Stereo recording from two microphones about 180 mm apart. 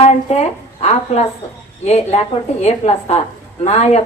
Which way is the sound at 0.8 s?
35° left (ahead or behind).